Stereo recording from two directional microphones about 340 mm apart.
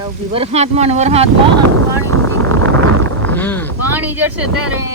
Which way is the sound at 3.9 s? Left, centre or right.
Centre.